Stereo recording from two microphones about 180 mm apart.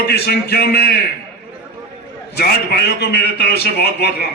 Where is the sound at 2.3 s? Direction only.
65° left (ahead or behind).